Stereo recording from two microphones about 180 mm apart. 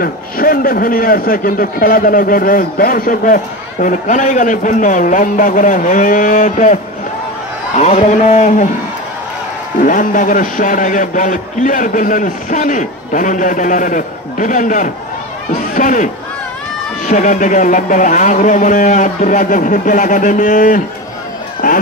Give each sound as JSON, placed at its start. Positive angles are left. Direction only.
{"t": 0.0, "sound": "a man's voice", "side_deg": 55}
{"t": 9.8, "sound": "a man's voice", "side_deg": 45}